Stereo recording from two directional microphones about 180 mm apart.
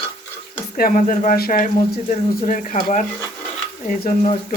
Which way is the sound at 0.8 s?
50° left (ahead or behind).